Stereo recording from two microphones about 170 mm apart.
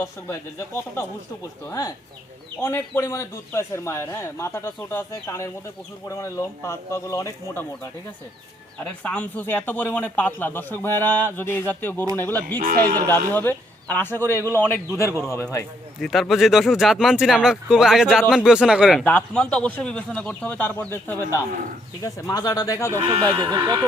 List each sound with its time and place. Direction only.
0.0 s speech: 15° left (ahead or behind)
2.6 s speech: 15° left (ahead or behind)
12.5 s speech: 55° right (ahead or behind)
13.1 s speech: 10° left (ahead or behind)
16.0 s speech: centre (ahead or behind)
19.0 s speech: 10° left (ahead or behind)
22.9 s speech: 30° right (ahead or behind)